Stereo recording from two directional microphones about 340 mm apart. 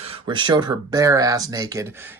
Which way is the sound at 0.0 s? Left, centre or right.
Centre.